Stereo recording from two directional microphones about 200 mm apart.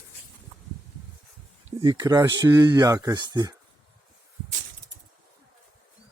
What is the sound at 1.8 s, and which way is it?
Speech, 20° right (ahead or behind).